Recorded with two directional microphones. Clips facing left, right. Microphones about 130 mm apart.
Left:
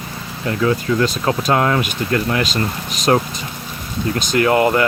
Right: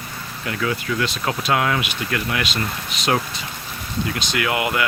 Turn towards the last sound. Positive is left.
turn(degrees=40)  # may be behind; listen again after turning